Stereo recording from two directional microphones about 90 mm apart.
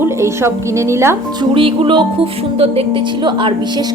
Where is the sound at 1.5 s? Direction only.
75° right (ahead or behind).